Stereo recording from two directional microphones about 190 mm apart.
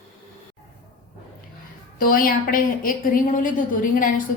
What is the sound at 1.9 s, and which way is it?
A woman's voice, 50° left (ahead or behind).